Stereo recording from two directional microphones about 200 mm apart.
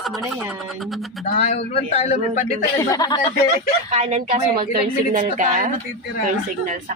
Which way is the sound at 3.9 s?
35° right (ahead or behind).